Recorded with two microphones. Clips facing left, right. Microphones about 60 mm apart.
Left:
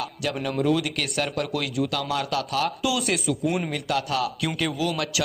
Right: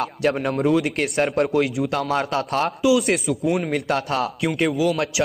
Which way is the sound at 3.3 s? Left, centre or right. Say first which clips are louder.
Right 2 dB; centre.